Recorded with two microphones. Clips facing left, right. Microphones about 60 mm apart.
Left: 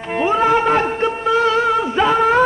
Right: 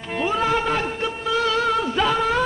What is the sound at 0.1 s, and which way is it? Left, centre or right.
Music, left.